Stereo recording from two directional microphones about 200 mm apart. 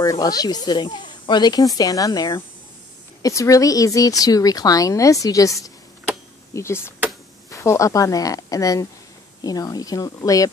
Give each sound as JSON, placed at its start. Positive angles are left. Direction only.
{"t": 0.0, "sound": "speech", "side_deg": 20}